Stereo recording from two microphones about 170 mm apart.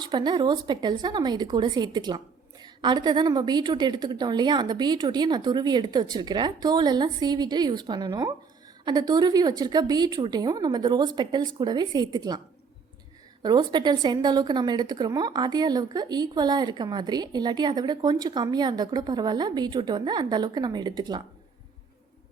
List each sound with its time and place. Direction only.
0.0 s a woman's voice: 25° right (ahead or behind)
13.4 s a woman's voice: 25° right (ahead or behind)